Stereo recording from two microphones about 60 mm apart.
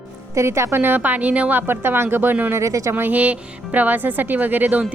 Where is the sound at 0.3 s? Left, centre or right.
Right.